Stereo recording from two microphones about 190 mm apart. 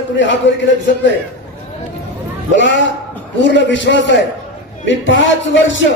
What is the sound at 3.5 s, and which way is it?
A man's voice, 70° left (ahead or behind).